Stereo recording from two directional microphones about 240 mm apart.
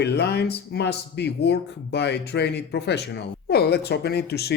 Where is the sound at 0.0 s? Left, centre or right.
Left.